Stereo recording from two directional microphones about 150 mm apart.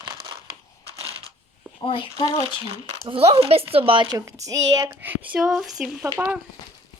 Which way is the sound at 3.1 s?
40° right (ahead or behind).